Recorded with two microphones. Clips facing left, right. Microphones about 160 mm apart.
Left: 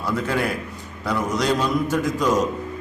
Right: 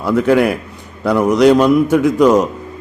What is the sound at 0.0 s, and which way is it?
A man's voice, 65° right (ahead or behind).